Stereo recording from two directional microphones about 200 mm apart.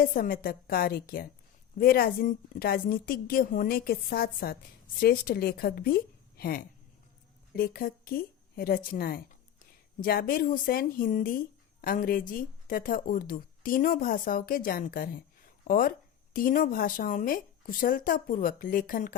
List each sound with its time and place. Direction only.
0.0 s a woman's voice: 45° left (ahead or behind)